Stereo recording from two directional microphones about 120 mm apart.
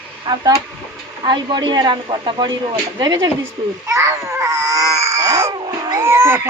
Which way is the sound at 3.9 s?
25° right (ahead or behind).